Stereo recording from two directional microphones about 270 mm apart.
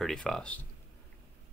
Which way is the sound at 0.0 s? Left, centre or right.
Centre.